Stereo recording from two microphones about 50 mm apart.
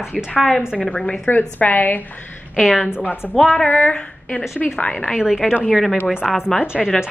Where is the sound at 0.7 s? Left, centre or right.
Left.